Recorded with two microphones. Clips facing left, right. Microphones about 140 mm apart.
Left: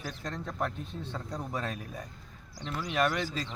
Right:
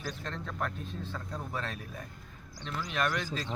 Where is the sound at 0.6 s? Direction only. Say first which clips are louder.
Left 2 dB; 15° left (ahead or behind).